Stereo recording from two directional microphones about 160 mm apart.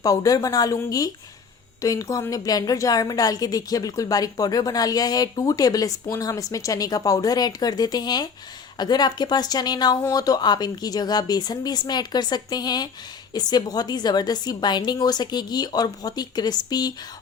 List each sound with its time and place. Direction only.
0.0 s a woman's voice: 20° left (ahead or behind)